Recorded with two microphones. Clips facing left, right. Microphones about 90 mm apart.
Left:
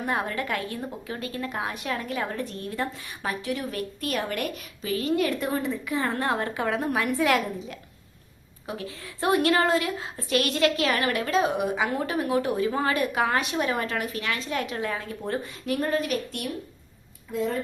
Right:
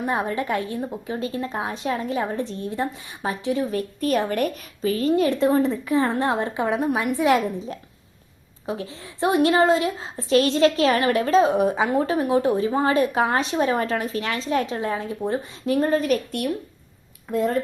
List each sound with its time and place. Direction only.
0.0 s a woman's voice: 20° right (ahead or behind)
8.6 s a woman's voice: 30° right (ahead or behind)
15.6 s a woman's voice: 35° right (ahead or behind); by 17.6 s 55° right (ahead or behind)